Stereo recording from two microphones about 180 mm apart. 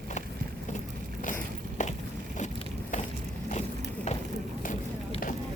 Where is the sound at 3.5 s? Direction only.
40° left (ahead or behind).